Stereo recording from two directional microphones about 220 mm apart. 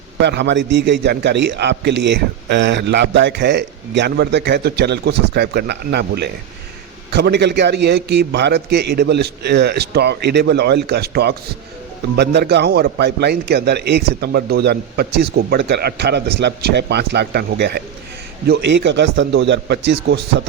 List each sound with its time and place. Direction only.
0.2 s a man's voice: 50° right (ahead or behind)